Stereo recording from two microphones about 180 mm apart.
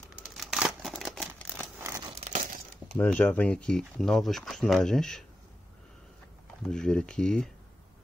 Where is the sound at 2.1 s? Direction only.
35° right (ahead or behind).